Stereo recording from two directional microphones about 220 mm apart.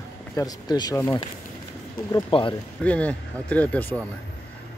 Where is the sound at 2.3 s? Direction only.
20° left (ahead or behind).